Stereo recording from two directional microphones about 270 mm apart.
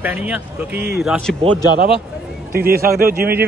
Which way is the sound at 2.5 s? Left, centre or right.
Right.